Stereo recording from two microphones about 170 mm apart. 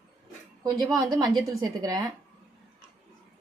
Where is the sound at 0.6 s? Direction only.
20° right (ahead or behind).